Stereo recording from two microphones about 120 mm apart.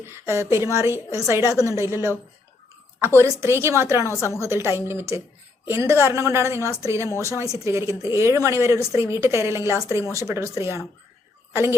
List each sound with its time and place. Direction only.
0.0 s a woman's voice: 20° right (ahead or behind)
3.2 s a woman's voice: 25° right (ahead or behind)
4.2 s a woman's voice: 25° left (ahead or behind)
4.4 s a woman's voice: 25° right (ahead or behind)